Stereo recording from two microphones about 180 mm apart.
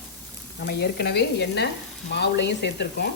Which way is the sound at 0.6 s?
65° left (ahead or behind).